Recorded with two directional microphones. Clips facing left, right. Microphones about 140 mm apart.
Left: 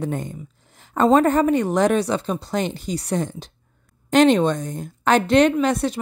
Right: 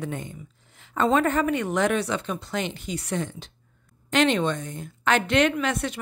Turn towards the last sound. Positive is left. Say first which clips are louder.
# left 7 dB
turn(degrees=35)  # may be behind; listen again after turning